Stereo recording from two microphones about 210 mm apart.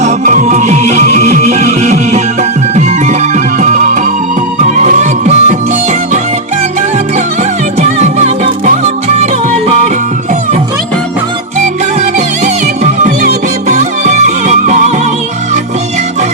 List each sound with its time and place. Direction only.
0.0 s music: 35° right (ahead or behind)
7.8 s music: 30° right (ahead or behind)
12.8 s music: 35° right (ahead or behind)